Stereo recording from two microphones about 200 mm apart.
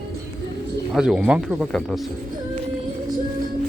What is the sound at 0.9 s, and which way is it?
Speech, 5° right (ahead or behind).